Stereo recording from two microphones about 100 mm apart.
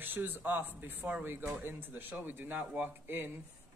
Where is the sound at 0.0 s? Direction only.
20° right (ahead or behind).